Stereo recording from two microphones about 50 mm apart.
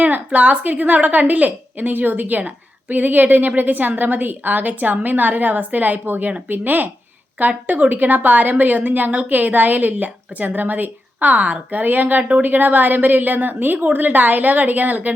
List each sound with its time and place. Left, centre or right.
0.3 s a woman's voice: right